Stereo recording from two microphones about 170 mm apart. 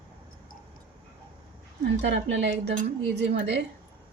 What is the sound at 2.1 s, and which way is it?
Speech, 85° right.